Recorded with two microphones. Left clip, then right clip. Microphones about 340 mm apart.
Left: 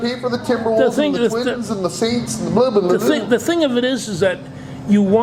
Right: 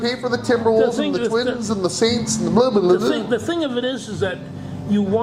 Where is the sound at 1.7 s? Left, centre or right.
Right.